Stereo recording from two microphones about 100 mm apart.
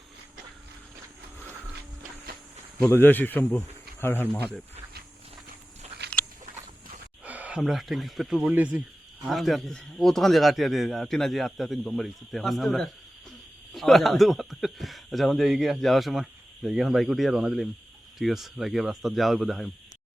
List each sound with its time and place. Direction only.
2.8 s speech: 20° left (ahead or behind)
3.6 s a sound: 25° left (ahead or behind)
7.3 s a sound: 15° right (ahead or behind)
7.6 s speech: centre (ahead or behind)
8.4 s speech: 15° right (ahead or behind)
9.2 s speech: centre (ahead or behind)